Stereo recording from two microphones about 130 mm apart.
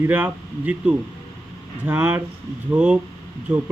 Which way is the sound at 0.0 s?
15° right (ahead or behind).